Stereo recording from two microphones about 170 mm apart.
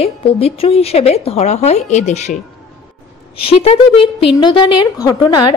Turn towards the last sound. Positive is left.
turn(degrees=25)  # may be behind; listen again after turning